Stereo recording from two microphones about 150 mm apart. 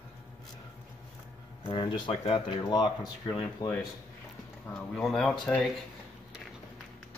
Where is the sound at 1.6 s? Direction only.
35° left (ahead or behind).